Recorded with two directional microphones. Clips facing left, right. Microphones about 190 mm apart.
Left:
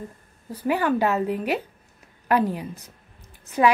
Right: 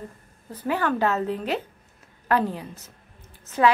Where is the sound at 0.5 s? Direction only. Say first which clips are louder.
Left 3 dB; 10° left (ahead or behind).